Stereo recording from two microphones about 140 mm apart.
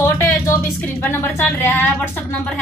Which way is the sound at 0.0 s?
20° left (ahead or behind).